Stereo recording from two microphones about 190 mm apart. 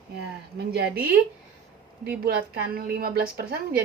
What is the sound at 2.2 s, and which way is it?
A woman's voice, 55° right (ahead or behind).